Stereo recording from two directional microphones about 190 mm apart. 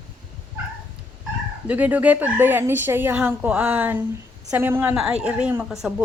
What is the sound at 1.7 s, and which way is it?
A woman's voice, 10° right (ahead or behind).